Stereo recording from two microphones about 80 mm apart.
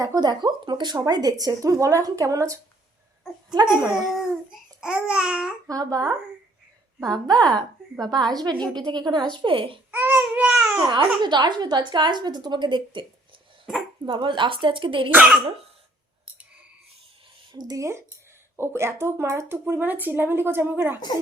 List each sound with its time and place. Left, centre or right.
0.0 s speech: right
3.5 s a woman's voice: right
4.8 s babbling: centre
5.6 s a woman's voice: right
9.3 s speech: right
9.9 s babbling: right
10.8 s a woman's voice: right
17.5 s speech: right
17.7 s speech: right